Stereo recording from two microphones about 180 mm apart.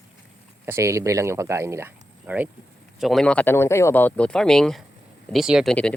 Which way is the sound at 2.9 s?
Centre (ahead or behind).